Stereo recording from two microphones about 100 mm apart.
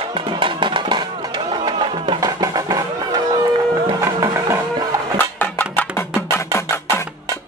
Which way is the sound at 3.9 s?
25° right (ahead or behind).